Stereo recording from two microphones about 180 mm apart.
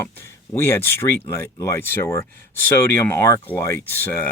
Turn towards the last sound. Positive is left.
turn(degrees=10)  # may be behind; listen again after turning